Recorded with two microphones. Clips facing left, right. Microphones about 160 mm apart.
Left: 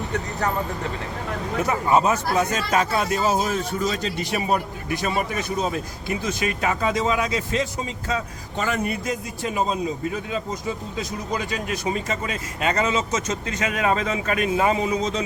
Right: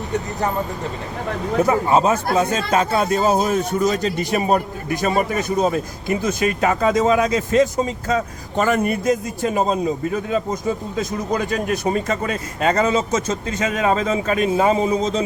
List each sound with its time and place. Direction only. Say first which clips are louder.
1.6 s a man's voice: right 3 dB; 25° right (ahead or behind)